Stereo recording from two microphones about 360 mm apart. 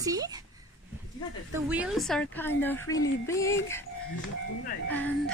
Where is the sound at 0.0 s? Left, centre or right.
Centre.